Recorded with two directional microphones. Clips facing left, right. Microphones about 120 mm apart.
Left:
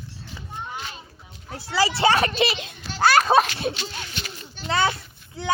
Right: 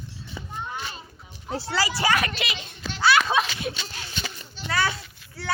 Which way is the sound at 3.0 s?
40° left (ahead or behind).